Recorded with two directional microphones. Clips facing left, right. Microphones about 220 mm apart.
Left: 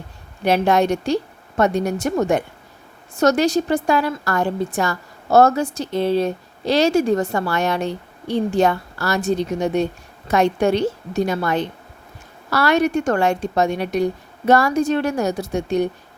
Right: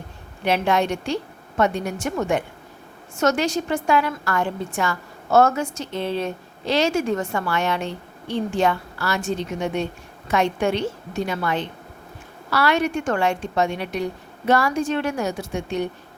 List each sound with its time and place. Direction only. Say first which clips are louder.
0.4 s a woman's voice: left 4 dB; 40° left (ahead or behind)